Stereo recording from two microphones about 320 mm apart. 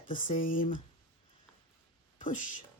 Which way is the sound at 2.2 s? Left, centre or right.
Left.